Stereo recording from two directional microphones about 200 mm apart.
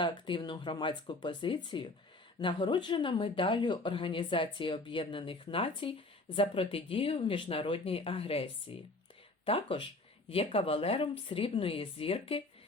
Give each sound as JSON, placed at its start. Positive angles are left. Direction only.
{"t": 0.0, "sound": "a woman's voice", "side_deg": 25}